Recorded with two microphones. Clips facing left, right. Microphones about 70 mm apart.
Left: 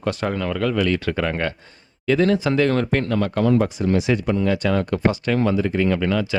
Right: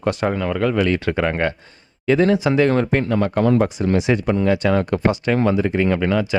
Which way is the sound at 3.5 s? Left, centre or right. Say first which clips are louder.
Right 1 dB; right.